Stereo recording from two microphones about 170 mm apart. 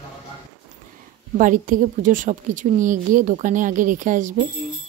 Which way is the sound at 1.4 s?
50° right (ahead or behind).